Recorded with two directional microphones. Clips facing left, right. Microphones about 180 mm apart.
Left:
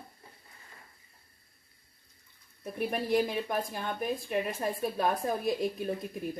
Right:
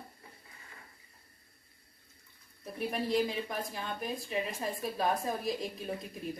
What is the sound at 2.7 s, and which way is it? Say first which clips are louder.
Speech: left 3 dB; 55° left (ahead or behind).